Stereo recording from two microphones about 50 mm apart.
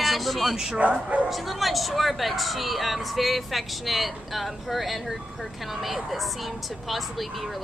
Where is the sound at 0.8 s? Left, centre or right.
Right.